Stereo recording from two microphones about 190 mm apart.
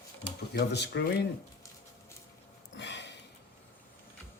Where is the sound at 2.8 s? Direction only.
70° left (ahead or behind).